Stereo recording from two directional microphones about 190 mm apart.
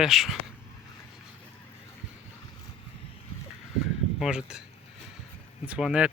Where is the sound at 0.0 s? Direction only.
Centre (ahead or behind).